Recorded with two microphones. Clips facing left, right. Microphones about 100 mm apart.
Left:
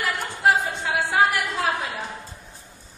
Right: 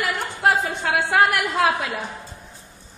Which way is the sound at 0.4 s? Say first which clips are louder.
Even; 60° right (ahead or behind).